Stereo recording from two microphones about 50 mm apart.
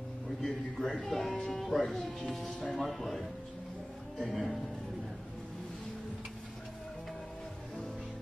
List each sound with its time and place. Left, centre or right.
0.4 s speech: centre
1.9 s speech: centre
2.7 s speech: centre